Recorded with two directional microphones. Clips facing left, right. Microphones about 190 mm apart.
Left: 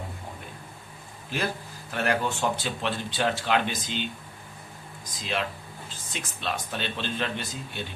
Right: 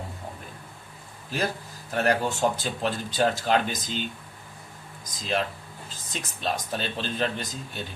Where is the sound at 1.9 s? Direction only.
40° right (ahead or behind).